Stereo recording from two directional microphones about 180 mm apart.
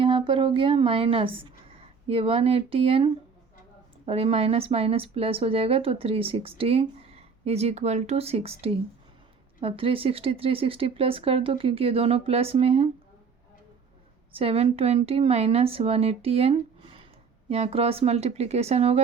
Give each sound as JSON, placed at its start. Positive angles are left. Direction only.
{"t": 0.0, "sound": "speech", "side_deg": -30}
{"t": 14.3, "sound": "speech", "side_deg": -30}